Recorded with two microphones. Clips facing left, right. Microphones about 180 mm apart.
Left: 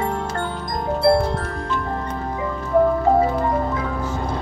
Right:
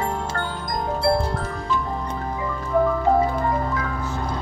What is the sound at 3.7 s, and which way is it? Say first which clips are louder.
Music: left 2 dB; 25° left (ahead or behind).